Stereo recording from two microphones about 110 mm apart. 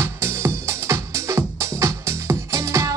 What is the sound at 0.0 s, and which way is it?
Music, 20° right (ahead or behind).